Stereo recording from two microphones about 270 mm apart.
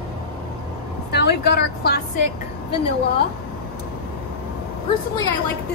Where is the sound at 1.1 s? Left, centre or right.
Left.